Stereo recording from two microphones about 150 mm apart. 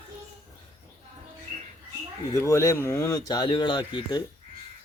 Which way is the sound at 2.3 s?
20° left (ahead or behind).